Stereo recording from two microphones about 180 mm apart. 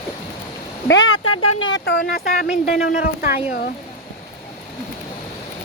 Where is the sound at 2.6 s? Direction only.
50° left (ahead or behind).